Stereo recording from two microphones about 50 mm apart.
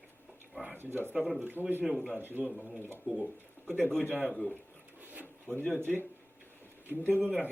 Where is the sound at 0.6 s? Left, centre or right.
Right.